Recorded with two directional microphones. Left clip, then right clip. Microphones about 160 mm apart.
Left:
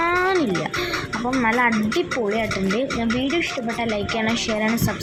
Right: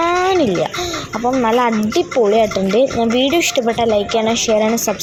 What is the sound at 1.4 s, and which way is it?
Speech, 25° right (ahead or behind).